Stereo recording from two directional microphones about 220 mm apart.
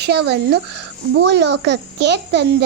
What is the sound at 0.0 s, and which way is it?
A child's voice, 50° right (ahead or behind).